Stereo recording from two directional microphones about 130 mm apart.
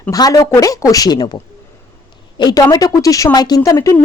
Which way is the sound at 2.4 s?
30° left (ahead or behind).